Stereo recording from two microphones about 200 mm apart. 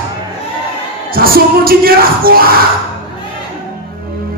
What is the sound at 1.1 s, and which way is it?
Speech, 45° right (ahead or behind).